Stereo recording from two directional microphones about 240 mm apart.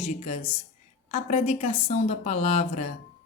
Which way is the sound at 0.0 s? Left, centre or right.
Left.